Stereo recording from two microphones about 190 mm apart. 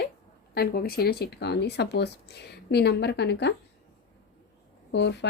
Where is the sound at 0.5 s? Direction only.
55° left (ahead or behind).